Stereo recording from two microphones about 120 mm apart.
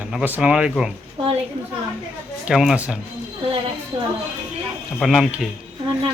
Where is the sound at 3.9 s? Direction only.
50° right (ahead or behind).